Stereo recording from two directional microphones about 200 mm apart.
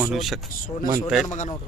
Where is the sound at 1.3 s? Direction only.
35° left (ahead or behind).